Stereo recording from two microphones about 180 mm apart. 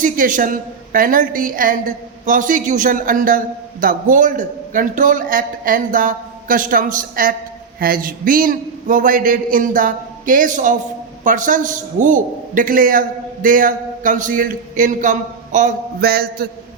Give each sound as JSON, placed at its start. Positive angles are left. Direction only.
{"t": 0.0, "sound": "a woman's voice", "side_deg": -45}